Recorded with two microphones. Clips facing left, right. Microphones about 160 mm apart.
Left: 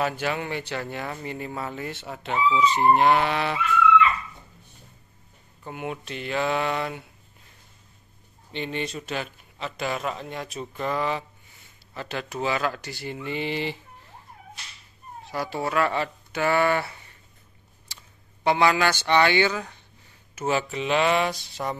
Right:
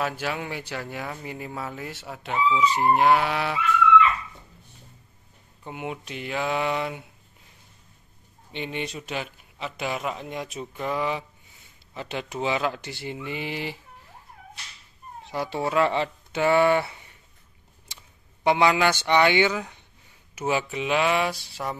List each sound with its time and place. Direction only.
0.0 s speech: 5° right (ahead or behind)
5.7 s speech: 15° right (ahead or behind)
8.5 s speech: 10° right (ahead or behind)
15.2 s speech: 20° right (ahead or behind)
18.4 s speech: 15° right (ahead or behind)